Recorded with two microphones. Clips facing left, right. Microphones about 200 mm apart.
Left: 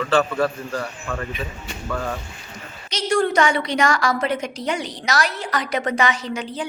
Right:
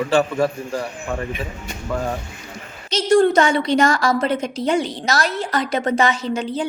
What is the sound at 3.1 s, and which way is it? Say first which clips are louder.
A woman's voice: right 4 dB; 25° right (ahead or behind).